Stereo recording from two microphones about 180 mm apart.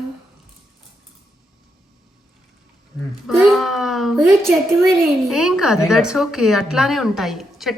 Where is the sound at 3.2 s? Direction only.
Centre (ahead or behind).